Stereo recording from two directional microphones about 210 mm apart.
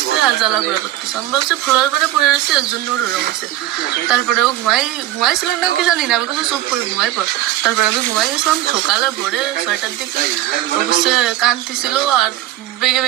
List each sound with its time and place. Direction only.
0.2 s speech: centre (ahead or behind)
3.8 s speech: 5° right (ahead or behind)
7.6 s speech: centre (ahead or behind)